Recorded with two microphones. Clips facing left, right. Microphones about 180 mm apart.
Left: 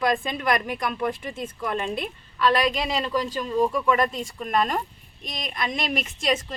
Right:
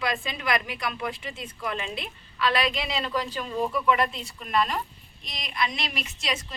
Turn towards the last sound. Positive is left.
turn(degrees=50)  # may be behind; listen again after turning